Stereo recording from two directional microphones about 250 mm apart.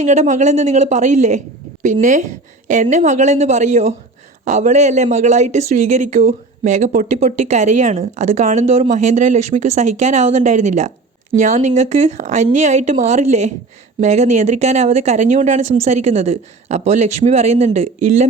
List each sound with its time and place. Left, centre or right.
0.0 s speech: right